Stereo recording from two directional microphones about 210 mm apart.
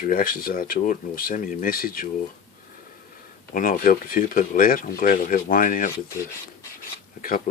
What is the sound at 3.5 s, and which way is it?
Speech, 40° left (ahead or behind).